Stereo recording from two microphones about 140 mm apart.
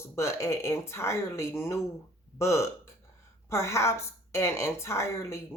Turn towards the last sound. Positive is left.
turn(degrees=20)  # may be behind; listen again after turning